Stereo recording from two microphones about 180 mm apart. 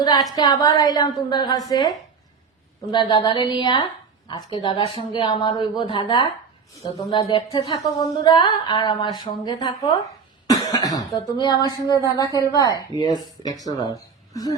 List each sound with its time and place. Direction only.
0.0 s a sound: 25° left (ahead or behind)
0.3 s a woman's voice: 20° left (ahead or behind)
2.9 s a woman's voice: 25° left (ahead or behind)